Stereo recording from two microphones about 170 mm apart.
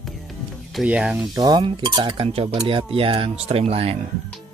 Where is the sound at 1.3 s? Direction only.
25° right (ahead or behind).